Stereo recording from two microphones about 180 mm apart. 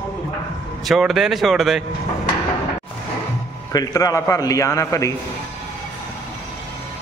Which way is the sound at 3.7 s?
20° left (ahead or behind).